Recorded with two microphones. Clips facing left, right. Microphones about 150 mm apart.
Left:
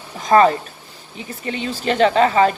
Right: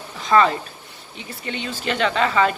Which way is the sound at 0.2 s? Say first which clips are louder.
Left 4 dB; 40° left (ahead or behind).